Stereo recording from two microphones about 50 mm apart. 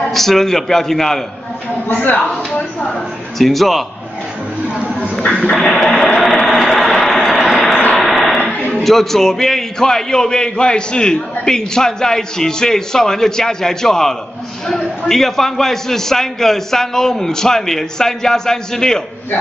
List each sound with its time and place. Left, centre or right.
0.1 s a man's voice: centre
2.1 s speech: left
2.8 s a woman's voice: centre
5.5 s a man's voice: centre
6.4 s vehicle: centre
7.9 s a sound: centre
8.8 s a man's voice: centre